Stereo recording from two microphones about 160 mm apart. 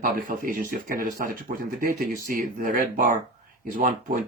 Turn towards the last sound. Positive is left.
turn(degrees=-60)  # may be behind; listen again after turning